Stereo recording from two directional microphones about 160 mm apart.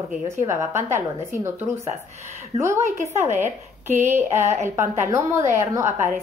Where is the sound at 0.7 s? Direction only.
50° right (ahead or behind).